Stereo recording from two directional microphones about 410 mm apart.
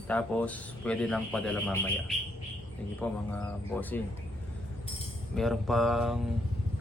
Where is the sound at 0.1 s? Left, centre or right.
Centre.